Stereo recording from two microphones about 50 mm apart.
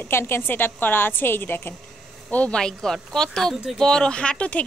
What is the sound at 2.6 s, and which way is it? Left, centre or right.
A woman's voice, centre.